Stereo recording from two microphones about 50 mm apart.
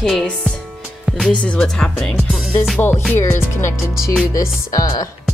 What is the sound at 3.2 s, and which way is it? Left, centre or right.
Music, left.